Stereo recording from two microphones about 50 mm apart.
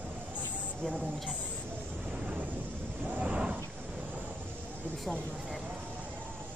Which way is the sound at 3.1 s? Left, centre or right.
Right.